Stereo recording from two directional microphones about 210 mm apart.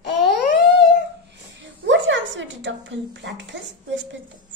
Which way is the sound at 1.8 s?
60° right (ahead or behind).